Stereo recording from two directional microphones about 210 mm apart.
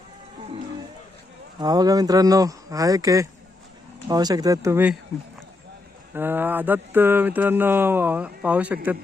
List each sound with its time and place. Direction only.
1.5 s mantra: 20° right (ahead or behind)
6.1 s mantra: 10° right (ahead or behind)